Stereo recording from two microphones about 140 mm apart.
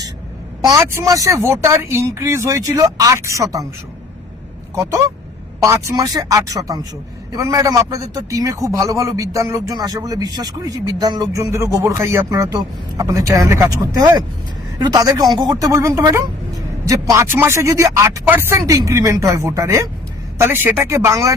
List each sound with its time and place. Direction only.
0.6 s a man's voice: 20° right (ahead or behind)
4.7 s a man's voice: 25° right (ahead or behind)